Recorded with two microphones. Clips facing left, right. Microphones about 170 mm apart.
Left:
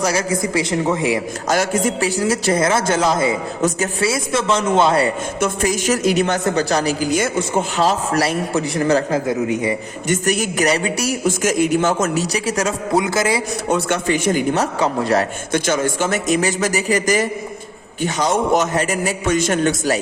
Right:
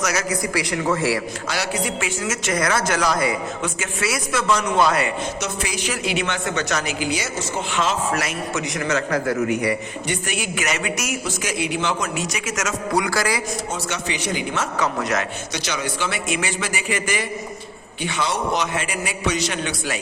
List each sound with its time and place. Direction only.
0.0 s a man's voice: 30° left (ahead or behind)
1.5 s a man's voice: 45° left (ahead or behind); by 5.1 s 30° left (ahead or behind)
5.4 s a man's voice: 45° left (ahead or behind)
7.8 s a man's voice: 40° left (ahead or behind); by 9.7 s 20° left (ahead or behind)
10.1 s a man's voice: 40° left (ahead or behind)
11.2 s a man's voice: 45° left (ahead or behind); by 13.4 s 20° left (ahead or behind)
13.7 s a man's voice: 55° left (ahead or behind); by 15.3 s 30° left (ahead or behind)
15.5 s a man's voice: 50° left (ahead or behind)